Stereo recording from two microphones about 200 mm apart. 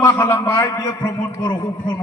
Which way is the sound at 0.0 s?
10° left (ahead or behind).